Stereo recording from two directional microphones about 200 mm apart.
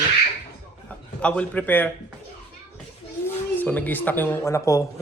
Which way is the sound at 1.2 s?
5° left (ahead or behind).